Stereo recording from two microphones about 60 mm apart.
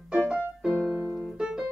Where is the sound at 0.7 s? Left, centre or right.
Right.